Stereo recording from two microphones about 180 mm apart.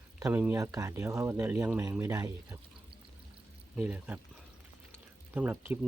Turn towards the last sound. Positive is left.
turn(degrees=-10)  # may be behind; listen again after turning